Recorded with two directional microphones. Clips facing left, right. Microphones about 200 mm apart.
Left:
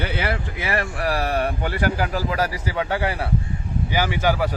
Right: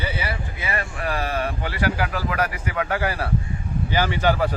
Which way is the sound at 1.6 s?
40° left (ahead or behind).